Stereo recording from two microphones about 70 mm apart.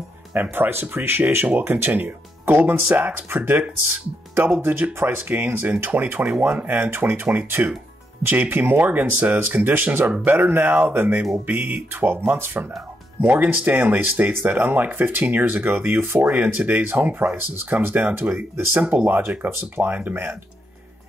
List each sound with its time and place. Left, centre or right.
0.3 s speech: right